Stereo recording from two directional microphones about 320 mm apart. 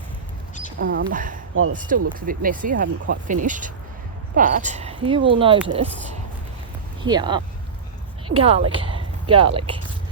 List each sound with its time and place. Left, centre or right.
0.8 s speech: right
7.0 s speech: centre